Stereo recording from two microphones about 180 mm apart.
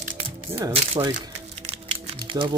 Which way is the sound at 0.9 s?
30° right (ahead or behind).